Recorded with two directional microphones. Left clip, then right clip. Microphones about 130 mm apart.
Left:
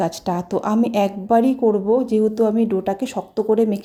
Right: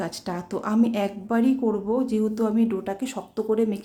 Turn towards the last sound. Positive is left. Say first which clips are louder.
# left 6 dB
turn(degrees=35)  # may be behind; listen again after turning